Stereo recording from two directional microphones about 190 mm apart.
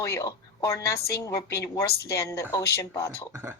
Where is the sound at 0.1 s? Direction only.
15° left (ahead or behind).